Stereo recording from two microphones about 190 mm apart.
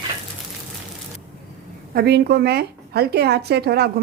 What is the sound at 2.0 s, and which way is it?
Speech, 60° right (ahead or behind).